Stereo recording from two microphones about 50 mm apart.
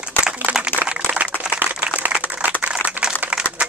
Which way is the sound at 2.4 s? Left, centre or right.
Right.